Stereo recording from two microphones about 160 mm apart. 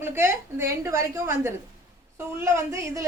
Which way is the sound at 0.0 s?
15° right (ahead or behind).